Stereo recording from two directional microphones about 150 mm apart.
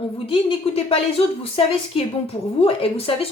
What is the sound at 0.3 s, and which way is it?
Speech, 35° left (ahead or behind).